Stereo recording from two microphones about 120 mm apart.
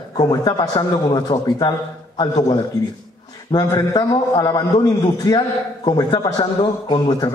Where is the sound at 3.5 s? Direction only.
35° left (ahead or behind).